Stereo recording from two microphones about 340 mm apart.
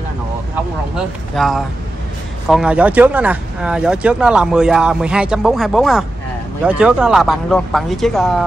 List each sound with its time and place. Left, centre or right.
1.3 s speech: centre